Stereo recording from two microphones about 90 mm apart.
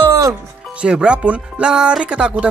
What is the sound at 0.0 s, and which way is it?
Music, 35° right (ahead or behind).